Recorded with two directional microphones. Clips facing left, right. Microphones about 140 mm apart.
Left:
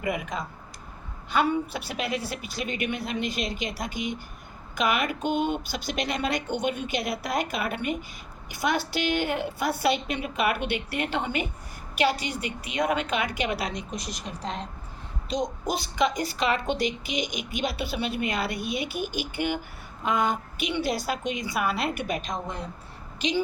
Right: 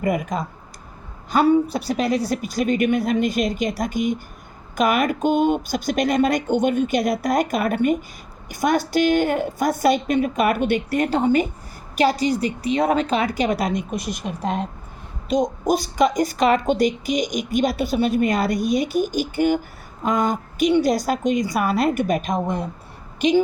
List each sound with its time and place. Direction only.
0.0 s a woman's voice: 45° right (ahead or behind)